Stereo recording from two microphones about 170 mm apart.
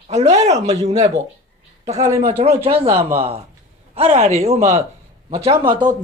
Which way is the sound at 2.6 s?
35° right (ahead or behind).